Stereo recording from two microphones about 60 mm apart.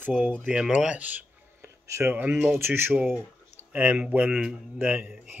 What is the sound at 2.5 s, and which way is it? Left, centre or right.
Speech, right.